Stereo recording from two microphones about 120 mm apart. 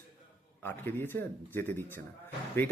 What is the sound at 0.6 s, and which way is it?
Speech, 15° left (ahead or behind).